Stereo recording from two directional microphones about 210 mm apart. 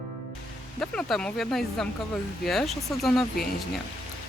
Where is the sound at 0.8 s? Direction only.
5° left (ahead or behind).